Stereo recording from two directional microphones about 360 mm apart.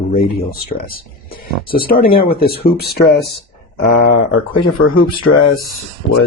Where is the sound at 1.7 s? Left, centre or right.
Left.